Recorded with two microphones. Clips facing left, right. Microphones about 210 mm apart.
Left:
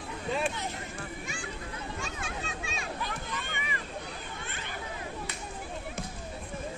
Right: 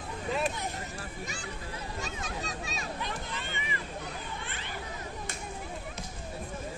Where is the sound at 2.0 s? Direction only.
40° right (ahead or behind).